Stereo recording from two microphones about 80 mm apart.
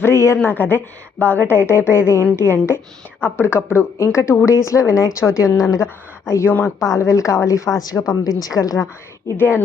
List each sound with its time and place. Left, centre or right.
0.0 s a woman's voice: left
0.4 s a woman's voice: left
6.7 s a woman's voice: left
9.2 s a woman's voice: left